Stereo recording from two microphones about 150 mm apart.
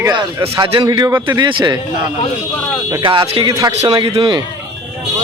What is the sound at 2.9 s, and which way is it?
A man's voice, 30° right (ahead or behind).